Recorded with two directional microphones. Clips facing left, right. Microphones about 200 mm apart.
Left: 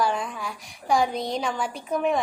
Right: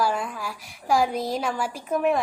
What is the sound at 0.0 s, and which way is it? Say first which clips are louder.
A woman's voice: even; 5° right (ahead or behind).